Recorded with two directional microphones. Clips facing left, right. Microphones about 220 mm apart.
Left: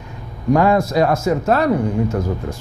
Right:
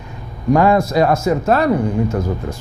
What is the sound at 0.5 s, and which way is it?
Speech, 15° right (ahead or behind).